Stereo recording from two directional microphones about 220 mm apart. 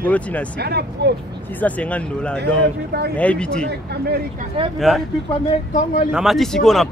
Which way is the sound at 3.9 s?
45° right (ahead or behind).